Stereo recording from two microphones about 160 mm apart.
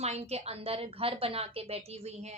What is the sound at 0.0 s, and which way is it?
A woman's voice, 40° right (ahead or behind).